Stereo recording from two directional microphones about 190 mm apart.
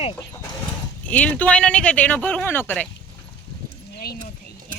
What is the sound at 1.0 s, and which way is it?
Speech, 10° left (ahead or behind).